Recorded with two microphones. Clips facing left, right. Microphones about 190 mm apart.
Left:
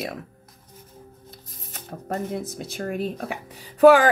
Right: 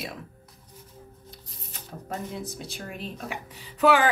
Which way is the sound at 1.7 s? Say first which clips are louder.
Left 5 dB; 55° left (ahead or behind).